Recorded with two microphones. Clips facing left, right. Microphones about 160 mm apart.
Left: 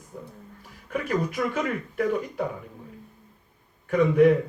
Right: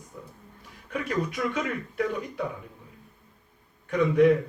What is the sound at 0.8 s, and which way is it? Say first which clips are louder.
A man's voice: left 2 dB; 45° left (ahead or behind).